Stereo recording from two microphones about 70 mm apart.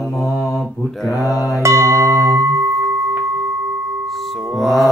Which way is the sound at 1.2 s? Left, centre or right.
Left.